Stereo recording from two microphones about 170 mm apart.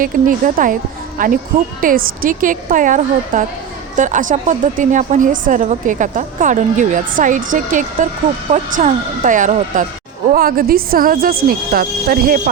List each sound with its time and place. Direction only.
0.0 s a woman's voice: 50° right (ahead or behind)